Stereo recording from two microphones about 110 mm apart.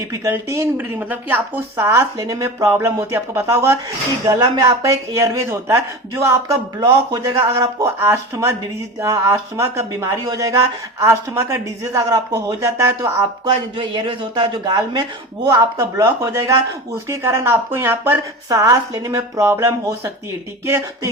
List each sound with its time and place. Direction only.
0.1 s speech: 25° right (ahead or behind)
13.4 s speech: 45° right (ahead or behind); by 21.1 s 25° right (ahead or behind)